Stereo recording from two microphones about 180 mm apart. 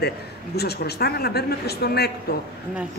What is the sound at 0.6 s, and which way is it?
Speech, 60° left (ahead or behind).